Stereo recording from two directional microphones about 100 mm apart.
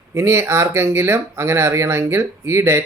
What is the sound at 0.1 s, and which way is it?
Speech, 30° right (ahead or behind).